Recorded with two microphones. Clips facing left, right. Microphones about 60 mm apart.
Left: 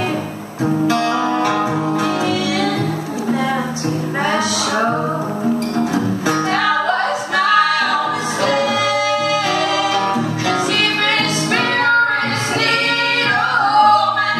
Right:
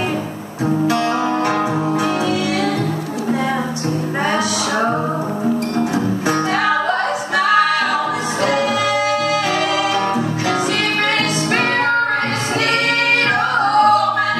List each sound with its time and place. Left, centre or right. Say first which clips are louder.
13.7 s music: left 1 dB; right